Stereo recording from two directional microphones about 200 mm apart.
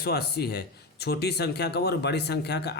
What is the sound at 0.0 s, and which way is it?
A man's voice, 50° left (ahead or behind).